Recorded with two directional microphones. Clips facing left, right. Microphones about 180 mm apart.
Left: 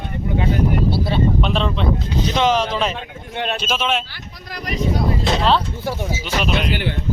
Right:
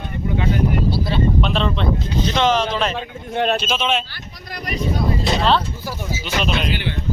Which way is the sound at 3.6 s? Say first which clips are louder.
Even; 10° left (ahead or behind).